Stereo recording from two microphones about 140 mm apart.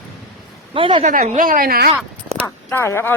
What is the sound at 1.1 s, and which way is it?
Speech, 70° right (ahead or behind).